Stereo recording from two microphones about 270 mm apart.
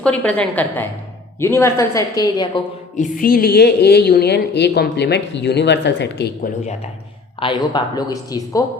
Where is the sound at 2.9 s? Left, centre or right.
Left.